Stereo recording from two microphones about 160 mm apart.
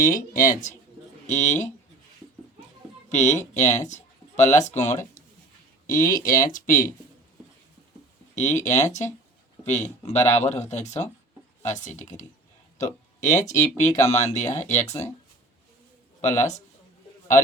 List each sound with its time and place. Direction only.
0.0 s speech: 55° left (ahead or behind)
3.1 s speech: 50° left (ahead or behind)
8.4 s speech: 50° left (ahead or behind)
16.4 s speech: 45° left (ahead or behind)